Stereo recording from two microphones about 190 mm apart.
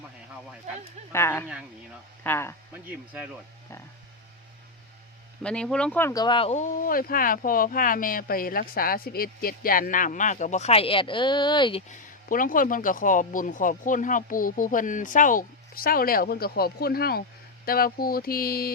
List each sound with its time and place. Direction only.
1.1 s speech: 10° left (ahead or behind)
2.7 s speech: 10° right (ahead or behind)
5.4 s speech: 5° left (ahead or behind)
6.2 s speech: 30° left (ahead or behind)
11.9 s speech: 45° left (ahead or behind)